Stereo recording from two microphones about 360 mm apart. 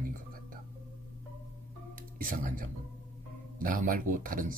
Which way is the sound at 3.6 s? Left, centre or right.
Right.